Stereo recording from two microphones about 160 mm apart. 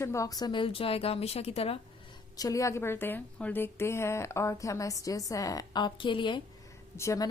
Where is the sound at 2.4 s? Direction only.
20° left (ahead or behind).